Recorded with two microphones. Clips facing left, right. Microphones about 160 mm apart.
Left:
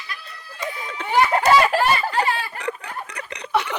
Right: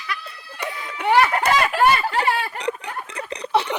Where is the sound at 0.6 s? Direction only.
70° right (ahead or behind).